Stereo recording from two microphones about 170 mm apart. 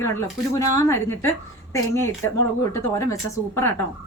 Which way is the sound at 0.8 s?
15° left (ahead or behind).